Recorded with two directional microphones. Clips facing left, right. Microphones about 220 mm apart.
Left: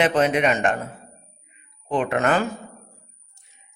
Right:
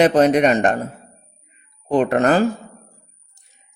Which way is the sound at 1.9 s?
40° right (ahead or behind).